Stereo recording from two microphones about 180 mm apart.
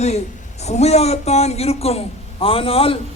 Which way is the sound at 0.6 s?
35° left (ahead or behind).